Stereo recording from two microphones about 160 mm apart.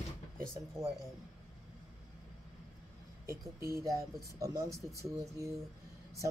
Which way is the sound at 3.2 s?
20° right (ahead or behind).